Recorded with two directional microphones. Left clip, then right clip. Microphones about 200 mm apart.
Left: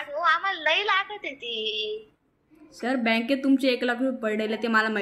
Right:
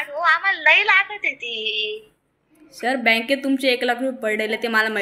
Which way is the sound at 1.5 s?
30° right (ahead or behind).